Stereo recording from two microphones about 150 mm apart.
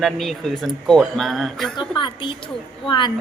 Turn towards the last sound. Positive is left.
turn(degrees=30)  # may be behind; listen again after turning